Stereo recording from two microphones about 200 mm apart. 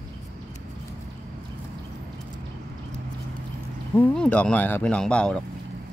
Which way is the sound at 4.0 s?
5° left (ahead or behind).